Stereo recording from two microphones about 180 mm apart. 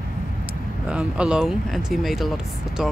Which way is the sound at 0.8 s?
5° right (ahead or behind).